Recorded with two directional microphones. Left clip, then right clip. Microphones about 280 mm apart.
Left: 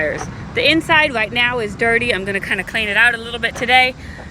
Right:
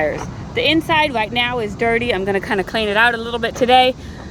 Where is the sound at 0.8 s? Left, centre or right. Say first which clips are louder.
Left 2 dB; centre; by 3.9 s right.